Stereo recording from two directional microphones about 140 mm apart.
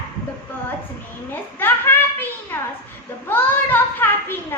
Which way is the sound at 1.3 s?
15° left (ahead or behind).